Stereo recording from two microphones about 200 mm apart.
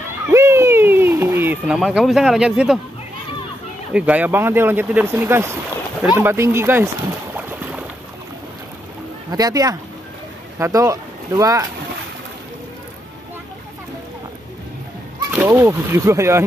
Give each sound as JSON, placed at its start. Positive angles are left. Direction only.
{"t": 0.3, "sound": "a sound", "side_deg": -15}
{"t": 1.8, "sound": "speech", "side_deg": -5}
{"t": 3.9, "sound": "speech", "side_deg": -5}
{"t": 7.3, "sound": "boat", "side_deg": -10}
{"t": 9.3, "sound": "speech", "side_deg": -20}
{"t": 15.3, "sound": "speech", "side_deg": -15}